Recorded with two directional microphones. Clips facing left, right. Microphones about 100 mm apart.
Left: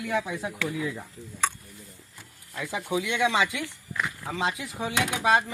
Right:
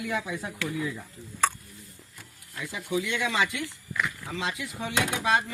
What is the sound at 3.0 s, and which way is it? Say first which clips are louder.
Speech: left 3 dB; 20° left (ahead or behind).